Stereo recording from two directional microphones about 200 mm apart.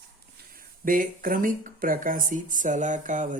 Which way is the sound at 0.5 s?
45° right (ahead or behind).